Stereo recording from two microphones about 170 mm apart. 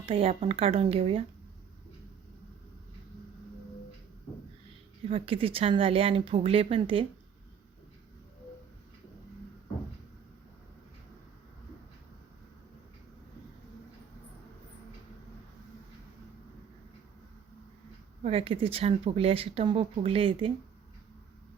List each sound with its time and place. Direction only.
0.0 s speech: 35° right (ahead or behind)
5.0 s speech: 35° right (ahead or behind)
18.2 s speech: 35° right (ahead or behind)